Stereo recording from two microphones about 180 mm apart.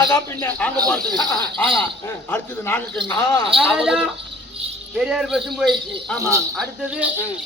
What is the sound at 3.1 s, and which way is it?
Speech, 25° left (ahead or behind).